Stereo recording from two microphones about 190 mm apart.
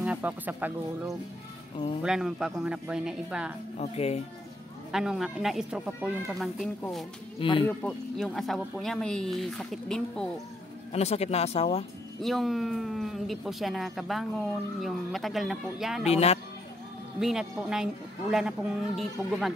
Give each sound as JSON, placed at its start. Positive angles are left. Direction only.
{"t": 0.0, "sound": "speech", "side_deg": -5}
{"t": 3.7, "sound": "speech", "side_deg": 35}
{"t": 4.9, "sound": "speech", "side_deg": 0}
{"t": 7.3, "sound": "speech", "side_deg": 25}
{"t": 7.6, "sound": "speech", "side_deg": 5}
{"t": 10.9, "sound": "speech", "side_deg": 35}
{"t": 12.2, "sound": "speech", "side_deg": 0}
{"t": 16.1, "sound": "speech", "side_deg": 35}
{"t": 17.2, "sound": "speech", "side_deg": -5}